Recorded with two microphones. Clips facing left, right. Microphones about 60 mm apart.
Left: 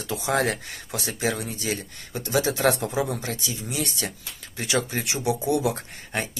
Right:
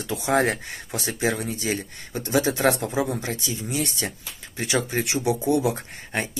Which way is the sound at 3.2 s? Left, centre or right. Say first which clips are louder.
Right 2 dB; right.